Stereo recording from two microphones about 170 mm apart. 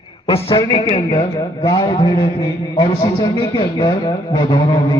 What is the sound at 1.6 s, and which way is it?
A man's voice, 25° left (ahead or behind).